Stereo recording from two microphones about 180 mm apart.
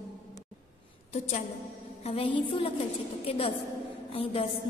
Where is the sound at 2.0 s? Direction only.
30° left (ahead or behind).